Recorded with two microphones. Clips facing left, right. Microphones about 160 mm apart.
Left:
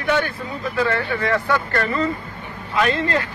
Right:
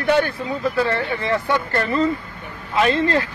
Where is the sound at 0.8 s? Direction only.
30° right (ahead or behind).